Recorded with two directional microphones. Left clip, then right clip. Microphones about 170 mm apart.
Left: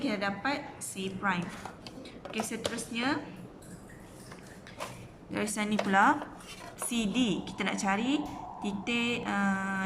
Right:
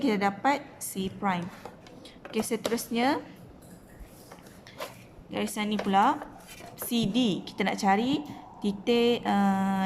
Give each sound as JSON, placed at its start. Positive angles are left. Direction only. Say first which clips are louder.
{"t": 0.0, "sound": "a woman's voice", "louder": "right 6 dB", "side_deg": -40}
{"t": 5.3, "sound": "a woman's voice", "louder": "right 1 dB", "side_deg": -15}